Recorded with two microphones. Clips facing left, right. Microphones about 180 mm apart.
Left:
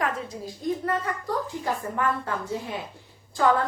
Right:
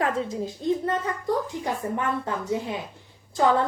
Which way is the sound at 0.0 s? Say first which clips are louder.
Right 3 dB; 25° right (ahead or behind).